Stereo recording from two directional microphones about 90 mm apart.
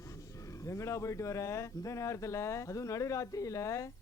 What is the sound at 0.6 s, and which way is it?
Speech, 35° left (ahead or behind).